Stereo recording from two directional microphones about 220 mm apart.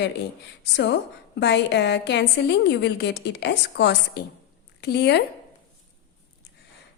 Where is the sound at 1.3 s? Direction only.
50° left (ahead or behind).